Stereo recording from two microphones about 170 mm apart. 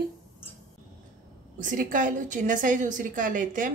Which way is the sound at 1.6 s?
50° right (ahead or behind).